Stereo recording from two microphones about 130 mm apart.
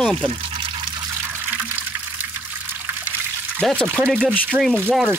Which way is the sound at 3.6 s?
5° left (ahead or behind).